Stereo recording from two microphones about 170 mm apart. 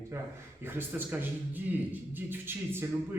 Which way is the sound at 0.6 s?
10° right (ahead or behind).